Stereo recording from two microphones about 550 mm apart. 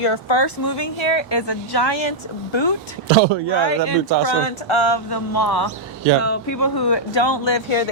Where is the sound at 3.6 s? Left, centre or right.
Left.